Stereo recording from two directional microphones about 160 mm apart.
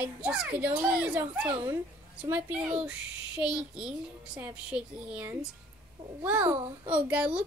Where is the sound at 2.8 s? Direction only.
5° right (ahead or behind).